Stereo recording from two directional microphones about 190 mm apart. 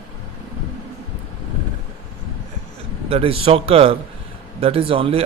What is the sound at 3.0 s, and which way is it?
A man's voice, 30° right (ahead or behind).